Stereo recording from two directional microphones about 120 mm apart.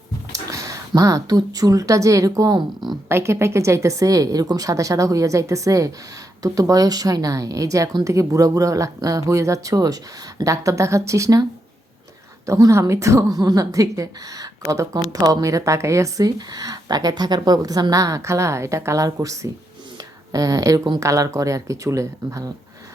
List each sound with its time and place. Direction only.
0.3 s speech: 25° right (ahead or behind)
12.5 s speech: 30° right (ahead or behind)